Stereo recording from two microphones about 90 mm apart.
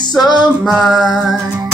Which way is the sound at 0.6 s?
5° right (ahead or behind).